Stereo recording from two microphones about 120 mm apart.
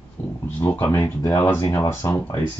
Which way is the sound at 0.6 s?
20° left (ahead or behind).